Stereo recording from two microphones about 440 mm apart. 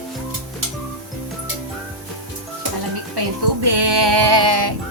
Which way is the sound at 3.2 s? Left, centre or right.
Right.